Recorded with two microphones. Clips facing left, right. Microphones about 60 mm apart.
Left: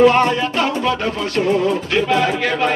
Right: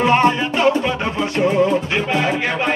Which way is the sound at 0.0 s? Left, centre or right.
Centre.